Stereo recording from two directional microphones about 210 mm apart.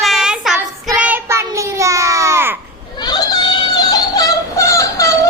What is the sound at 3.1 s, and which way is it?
Yodeling, 20° left (ahead or behind).